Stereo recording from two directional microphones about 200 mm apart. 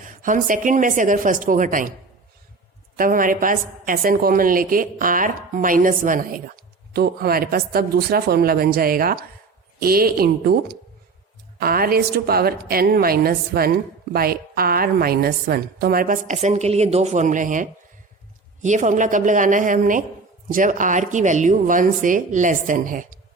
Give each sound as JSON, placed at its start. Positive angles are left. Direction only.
{"t": 0.0, "sound": "a woman's voice", "side_deg": -40}
{"t": 2.9, "sound": "a woman's voice", "side_deg": -45}